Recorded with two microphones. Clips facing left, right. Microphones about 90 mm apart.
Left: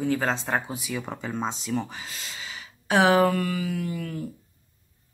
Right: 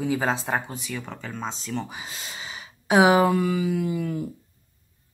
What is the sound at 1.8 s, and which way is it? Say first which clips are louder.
Speech: right 1 dB; 20° right (ahead or behind).